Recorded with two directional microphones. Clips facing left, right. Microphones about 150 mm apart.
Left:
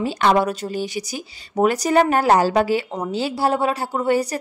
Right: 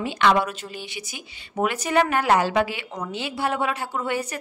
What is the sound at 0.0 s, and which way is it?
Speech, 40° left (ahead or behind).